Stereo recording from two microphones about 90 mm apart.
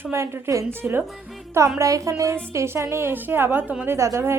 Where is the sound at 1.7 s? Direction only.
35° right (ahead or behind).